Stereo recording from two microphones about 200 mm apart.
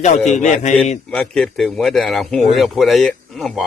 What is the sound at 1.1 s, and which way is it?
A man's voice, 5° left (ahead or behind).